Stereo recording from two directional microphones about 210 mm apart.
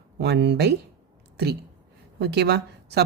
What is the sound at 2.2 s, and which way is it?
Speech, 50° right (ahead or behind).